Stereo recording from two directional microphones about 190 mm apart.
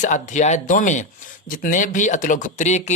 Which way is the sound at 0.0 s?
40° left (ahead or behind).